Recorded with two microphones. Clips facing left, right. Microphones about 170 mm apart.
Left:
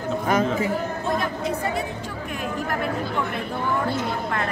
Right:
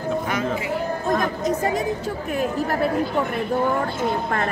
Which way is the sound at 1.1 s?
45° right (ahead or behind).